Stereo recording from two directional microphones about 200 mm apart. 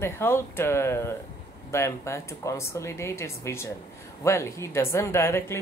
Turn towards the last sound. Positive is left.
turn(degrees=15)  # may be behind; listen again after turning